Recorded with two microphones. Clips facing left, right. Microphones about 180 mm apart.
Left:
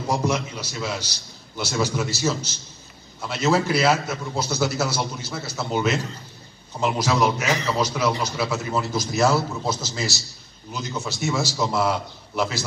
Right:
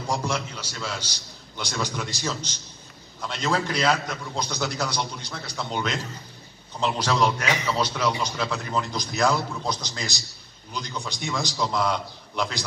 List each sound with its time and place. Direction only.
0.0 s a man's voice: 10° left (ahead or behind)